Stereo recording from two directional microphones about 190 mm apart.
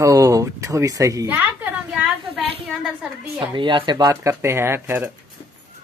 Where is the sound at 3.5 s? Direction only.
25° right (ahead or behind).